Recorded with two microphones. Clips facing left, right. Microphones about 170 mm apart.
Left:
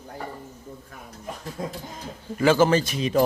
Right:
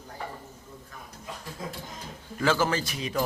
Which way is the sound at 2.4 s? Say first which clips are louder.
Left 7 dB; 25° left (ahead or behind).